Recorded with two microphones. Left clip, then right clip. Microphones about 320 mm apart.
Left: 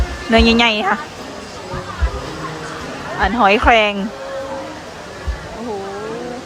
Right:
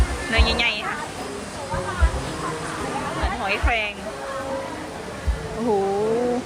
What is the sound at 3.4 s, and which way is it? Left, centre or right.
Speech, left.